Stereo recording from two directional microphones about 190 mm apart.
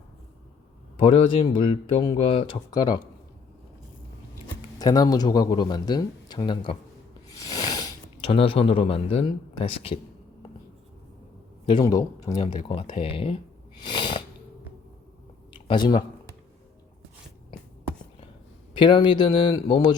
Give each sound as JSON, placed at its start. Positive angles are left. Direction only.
{"t": 0.9, "sound": "speech", "side_deg": 30}
{"t": 4.8, "sound": "speech", "side_deg": 20}
{"t": 7.3, "sound": "a sound", "side_deg": 20}
{"t": 11.7, "sound": "speech", "side_deg": 20}
{"t": 13.8, "sound": "sneeze", "side_deg": 25}
{"t": 15.6, "sound": "speech", "side_deg": 25}
{"t": 18.7, "sound": "speech", "side_deg": 25}